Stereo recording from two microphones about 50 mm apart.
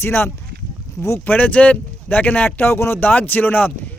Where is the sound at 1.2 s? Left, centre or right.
Left.